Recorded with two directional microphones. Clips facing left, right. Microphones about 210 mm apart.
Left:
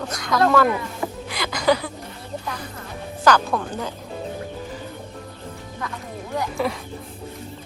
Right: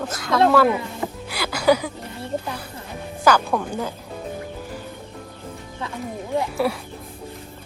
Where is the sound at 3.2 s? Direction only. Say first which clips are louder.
Even; 10° right (ahead or behind).